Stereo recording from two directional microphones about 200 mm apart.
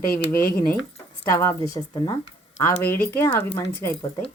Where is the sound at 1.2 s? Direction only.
15° left (ahead or behind).